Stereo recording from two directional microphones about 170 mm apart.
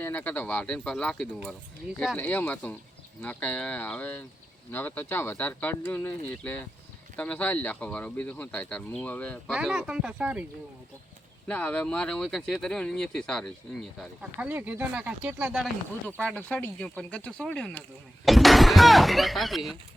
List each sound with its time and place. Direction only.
0.0 s speech: 10° left (ahead or behind)
9.6 s speech: 5° right (ahead or behind)
11.4 s speech: 10° left (ahead or behind)
14.2 s speech: 10° right (ahead or behind)
16.0 s speech: 10° left (ahead or behind)